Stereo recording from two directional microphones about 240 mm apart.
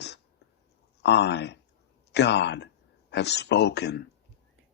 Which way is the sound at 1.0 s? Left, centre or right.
Left.